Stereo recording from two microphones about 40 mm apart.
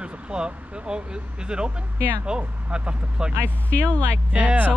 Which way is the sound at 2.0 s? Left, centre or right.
Right.